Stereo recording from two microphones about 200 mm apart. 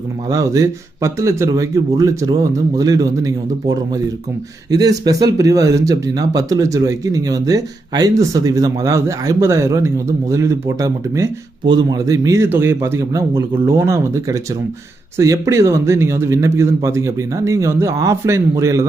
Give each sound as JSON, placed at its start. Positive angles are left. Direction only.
{"t": 0.3, "sound": "speech", "side_deg": -20}